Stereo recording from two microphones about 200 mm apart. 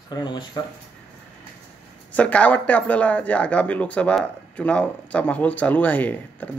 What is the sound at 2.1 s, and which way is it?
Speech, 5° left (ahead or behind).